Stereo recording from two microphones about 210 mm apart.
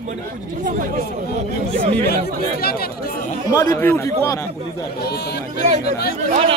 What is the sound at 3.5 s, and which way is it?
Speech, 15° left (ahead or behind).